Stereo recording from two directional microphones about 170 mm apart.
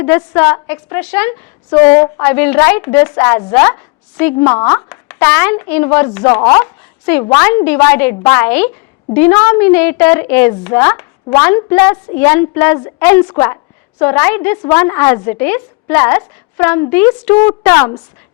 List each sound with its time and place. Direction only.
0.0 s a woman's voice: 15° left (ahead or behind)